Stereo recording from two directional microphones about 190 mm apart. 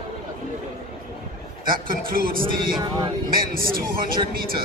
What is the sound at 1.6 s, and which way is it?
A man's voice, 50° right (ahead or behind).